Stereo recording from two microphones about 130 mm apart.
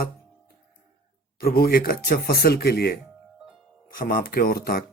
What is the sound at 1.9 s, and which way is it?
Speech, 90° left.